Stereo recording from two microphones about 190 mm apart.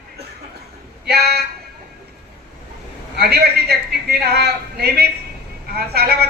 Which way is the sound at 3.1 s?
55° right (ahead or behind).